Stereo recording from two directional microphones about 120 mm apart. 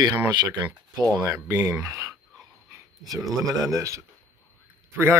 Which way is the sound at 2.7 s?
30° right (ahead or behind).